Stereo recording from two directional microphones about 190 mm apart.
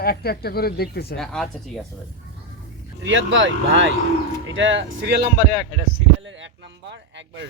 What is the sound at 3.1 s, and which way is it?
Speech, 80° right.